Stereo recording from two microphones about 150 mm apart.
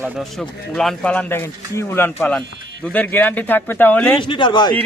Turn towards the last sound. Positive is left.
turn(degrees=30)  # may be behind; listen again after turning